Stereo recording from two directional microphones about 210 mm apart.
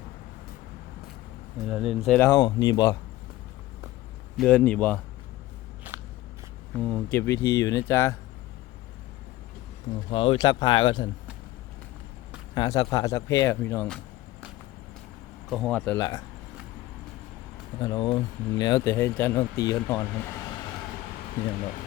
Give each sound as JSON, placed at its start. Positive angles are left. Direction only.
{"t": 1.6, "sound": "speech", "side_deg": 0}
{"t": 2.3, "sound": "speech", "side_deg": 20}
{"t": 4.4, "sound": "speech", "side_deg": 5}
{"t": 5.9, "sound": "biting", "side_deg": -10}
{"t": 6.7, "sound": "speech", "side_deg": 5}
{"t": 10.1, "sound": "speech", "side_deg": 25}
{"t": 12.5, "sound": "speech", "side_deg": 20}
{"t": 15.4, "sound": "speech", "side_deg": 0}
{"t": 16.0, "sound": "speech", "side_deg": 20}
{"t": 17.7, "sound": "speech", "side_deg": 20}